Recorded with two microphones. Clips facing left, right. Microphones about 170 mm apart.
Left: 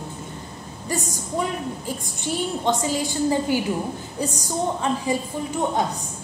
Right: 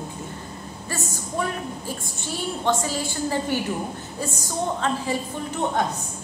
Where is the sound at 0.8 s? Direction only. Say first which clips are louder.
Left 4 dB; 15° left (ahead or behind).